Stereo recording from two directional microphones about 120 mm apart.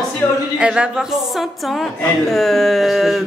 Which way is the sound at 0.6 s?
5° right (ahead or behind).